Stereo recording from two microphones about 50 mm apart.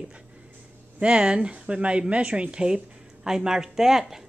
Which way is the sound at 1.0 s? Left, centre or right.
Right.